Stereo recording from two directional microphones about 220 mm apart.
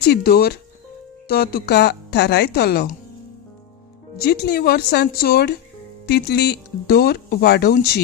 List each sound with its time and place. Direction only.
0.0 s speech: 45° left (ahead or behind)
4.2 s speech: 45° left (ahead or behind)